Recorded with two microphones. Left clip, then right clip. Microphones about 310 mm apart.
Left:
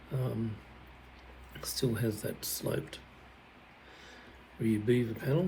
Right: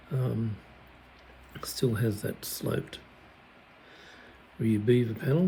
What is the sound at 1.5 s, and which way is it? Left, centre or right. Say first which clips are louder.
Speech: right 4 dB; centre.